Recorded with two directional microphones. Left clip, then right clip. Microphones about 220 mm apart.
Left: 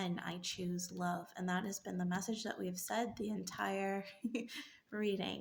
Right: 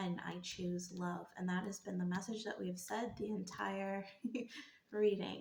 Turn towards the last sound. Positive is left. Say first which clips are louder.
# right 3 dB
turn(degrees=55)  # may be behind; listen again after turning